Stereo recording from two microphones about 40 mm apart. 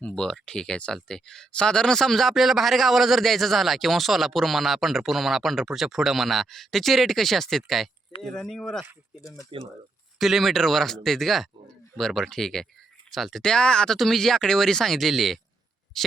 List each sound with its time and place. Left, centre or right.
0.1 s speech: centre
2.3 s a man's voice: centre
10.2 s a man's voice: centre
13.4 s speech: centre
13.9 s speech: centre